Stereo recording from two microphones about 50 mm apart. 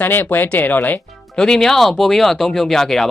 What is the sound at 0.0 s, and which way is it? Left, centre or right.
Speech, left.